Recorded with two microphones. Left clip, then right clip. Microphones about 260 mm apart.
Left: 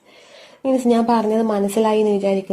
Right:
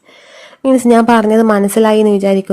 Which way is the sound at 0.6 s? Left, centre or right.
Right.